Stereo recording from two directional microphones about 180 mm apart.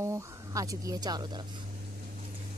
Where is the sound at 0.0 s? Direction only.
20° right (ahead or behind).